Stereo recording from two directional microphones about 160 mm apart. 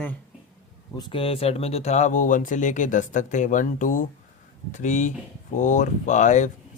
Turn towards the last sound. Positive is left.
turn(degrees=50)  # may be behind; listen again after turning